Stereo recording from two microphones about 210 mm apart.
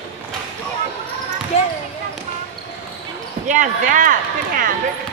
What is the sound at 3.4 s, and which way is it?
Speech, 35° right (ahead or behind).